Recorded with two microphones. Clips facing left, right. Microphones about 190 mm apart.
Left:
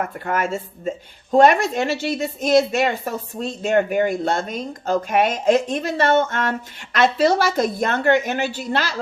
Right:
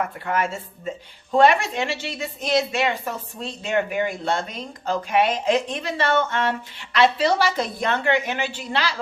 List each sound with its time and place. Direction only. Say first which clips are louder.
0.0 s speech: left 1 dB; 50° left (ahead or behind)